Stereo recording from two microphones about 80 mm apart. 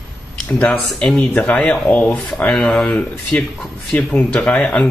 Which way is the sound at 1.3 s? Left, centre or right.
Centre.